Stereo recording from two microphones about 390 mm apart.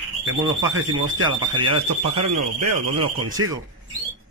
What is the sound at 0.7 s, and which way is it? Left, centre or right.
Speech, right.